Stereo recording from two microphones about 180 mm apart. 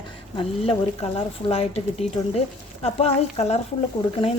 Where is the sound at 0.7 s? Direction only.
35° left (ahead or behind).